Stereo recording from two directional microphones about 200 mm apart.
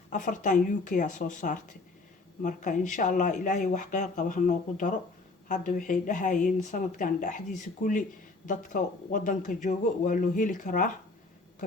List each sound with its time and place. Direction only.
0.1 s speech: 40° left (ahead or behind)